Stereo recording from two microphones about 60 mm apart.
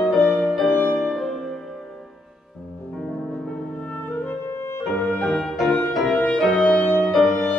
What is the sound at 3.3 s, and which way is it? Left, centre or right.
Music, centre.